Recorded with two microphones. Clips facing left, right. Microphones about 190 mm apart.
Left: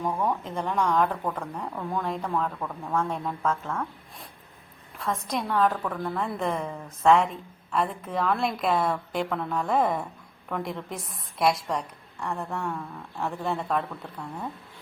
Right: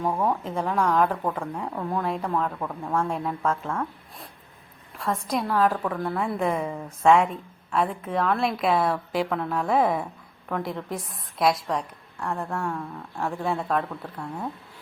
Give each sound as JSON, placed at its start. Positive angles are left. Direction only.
{"t": 0.0, "sound": "speech", "side_deg": -25}
{"t": 0.4, "sound": "a woman's voice", "side_deg": 0}